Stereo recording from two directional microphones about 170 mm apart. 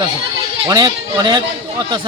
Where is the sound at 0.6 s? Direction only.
25° right (ahead or behind).